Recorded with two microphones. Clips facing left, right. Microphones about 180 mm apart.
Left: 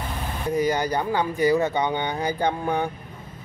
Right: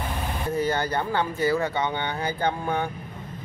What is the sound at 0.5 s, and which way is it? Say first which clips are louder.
Speech: left 3 dB; 15° left (ahead or behind).